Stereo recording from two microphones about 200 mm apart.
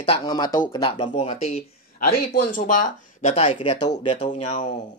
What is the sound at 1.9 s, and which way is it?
Speech, 45° left (ahead or behind).